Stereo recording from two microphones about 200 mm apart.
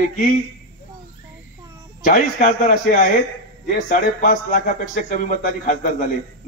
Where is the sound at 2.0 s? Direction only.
40° left (ahead or behind).